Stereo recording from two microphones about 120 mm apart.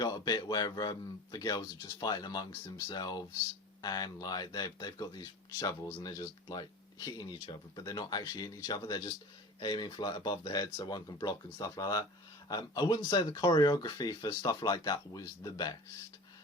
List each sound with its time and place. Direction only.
0.0 s speech: 35° left (ahead or behind)